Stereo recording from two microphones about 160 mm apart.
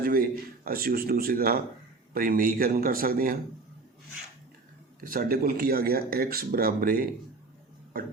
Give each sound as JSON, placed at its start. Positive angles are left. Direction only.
{"t": 0.0, "sound": "a man's voice", "side_deg": -65}
{"t": 4.9, "sound": "speech", "side_deg": -65}